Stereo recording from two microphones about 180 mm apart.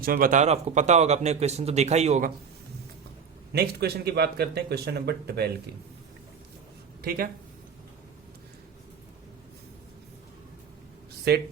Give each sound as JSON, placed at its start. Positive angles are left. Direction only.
{"t": 0.0, "sound": "speech", "side_deg": -55}
{"t": 3.5, "sound": "speech", "side_deg": -60}
{"t": 7.0, "sound": "speech", "side_deg": -55}
{"t": 11.3, "sound": "speech", "side_deg": -60}